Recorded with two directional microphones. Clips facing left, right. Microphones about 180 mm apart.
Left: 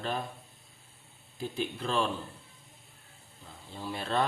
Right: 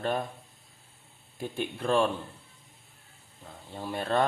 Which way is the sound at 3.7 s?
50° right (ahead or behind).